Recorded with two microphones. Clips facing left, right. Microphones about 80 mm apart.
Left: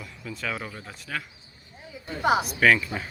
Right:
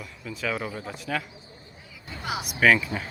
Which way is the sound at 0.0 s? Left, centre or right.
Centre.